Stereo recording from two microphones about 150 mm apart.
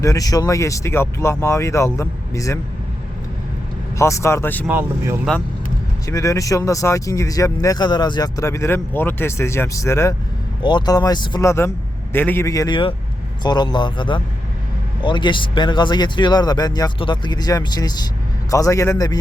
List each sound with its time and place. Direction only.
0.0 s speech: 20° left (ahead or behind)
3.9 s speech: 20° left (ahead or behind)
4.7 s speech: 15° right (ahead or behind)
6.1 s speech: 20° left (ahead or behind)
10.6 s speech: 30° left (ahead or behind)
11.4 s a man's voice: 15° left (ahead or behind)